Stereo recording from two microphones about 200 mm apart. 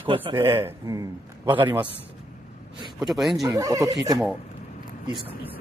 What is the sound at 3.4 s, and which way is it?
Speech, 15° right (ahead or behind).